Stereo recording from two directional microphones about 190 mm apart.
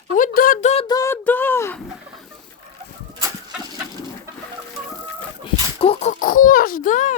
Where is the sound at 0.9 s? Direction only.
15° left (ahead or behind).